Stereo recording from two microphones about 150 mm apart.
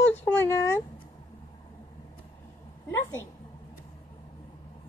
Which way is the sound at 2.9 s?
15° left (ahead or behind).